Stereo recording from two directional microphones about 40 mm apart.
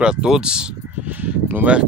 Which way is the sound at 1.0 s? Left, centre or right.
Right.